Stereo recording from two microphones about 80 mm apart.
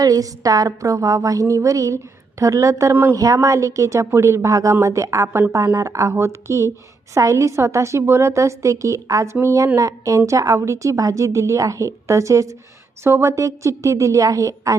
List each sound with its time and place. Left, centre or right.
0.0 s a woman's voice: right
2.9 s speech: right
3.2 s a woman's voice: right